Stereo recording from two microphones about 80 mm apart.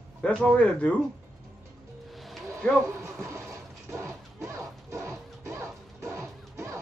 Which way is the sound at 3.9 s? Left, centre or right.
Right.